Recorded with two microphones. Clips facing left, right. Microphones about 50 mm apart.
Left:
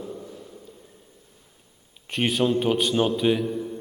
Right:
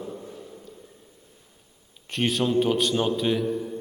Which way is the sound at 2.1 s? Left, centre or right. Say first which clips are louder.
Even; centre.